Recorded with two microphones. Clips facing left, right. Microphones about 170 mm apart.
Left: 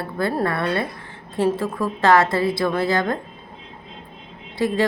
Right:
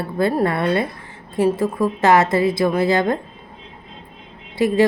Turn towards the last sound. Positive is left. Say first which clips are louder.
# right 4 dB
turn(degrees=-20)  # may be behind; listen again after turning